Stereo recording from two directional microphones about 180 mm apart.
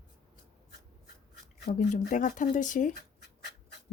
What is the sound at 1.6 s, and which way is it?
Speech, 45° left (ahead or behind).